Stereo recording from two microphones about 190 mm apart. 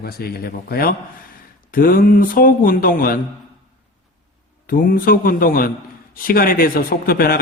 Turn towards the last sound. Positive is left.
turn(degrees=50)  # may be behind; listen again after turning